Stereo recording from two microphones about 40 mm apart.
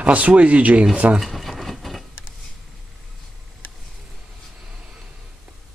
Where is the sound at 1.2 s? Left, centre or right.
Centre.